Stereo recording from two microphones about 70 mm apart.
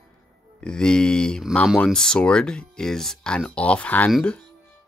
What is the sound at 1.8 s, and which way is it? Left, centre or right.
Speech, centre.